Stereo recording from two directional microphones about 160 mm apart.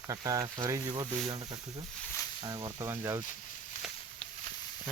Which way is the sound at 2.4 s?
25° right (ahead or behind).